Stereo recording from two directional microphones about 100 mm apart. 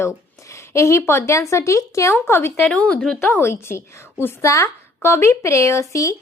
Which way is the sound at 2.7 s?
10° left (ahead or behind).